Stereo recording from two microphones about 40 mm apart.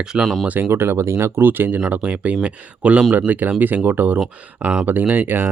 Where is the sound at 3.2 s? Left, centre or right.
Right.